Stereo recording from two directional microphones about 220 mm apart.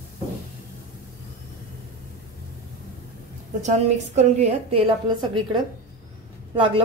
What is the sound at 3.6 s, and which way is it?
Speech, 30° right (ahead or behind).